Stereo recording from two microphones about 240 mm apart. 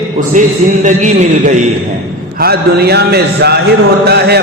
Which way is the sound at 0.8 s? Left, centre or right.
Right.